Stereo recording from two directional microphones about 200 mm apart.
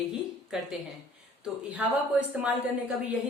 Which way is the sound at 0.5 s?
5° right (ahead or behind).